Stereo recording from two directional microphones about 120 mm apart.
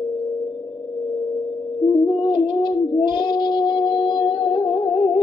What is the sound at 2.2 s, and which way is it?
Child singing, 40° left (ahead or behind).